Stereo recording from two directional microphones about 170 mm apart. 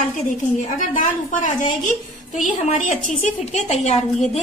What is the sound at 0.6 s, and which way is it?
A woman's voice, 50° left (ahead or behind).